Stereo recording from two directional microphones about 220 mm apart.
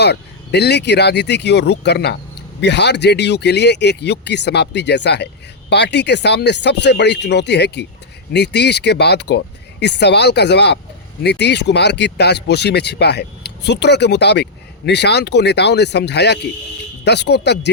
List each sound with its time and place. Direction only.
0.0 s speech: 50° left (ahead or behind)